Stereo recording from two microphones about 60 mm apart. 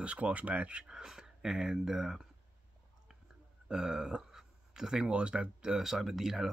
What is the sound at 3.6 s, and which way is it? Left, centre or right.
Speech, centre.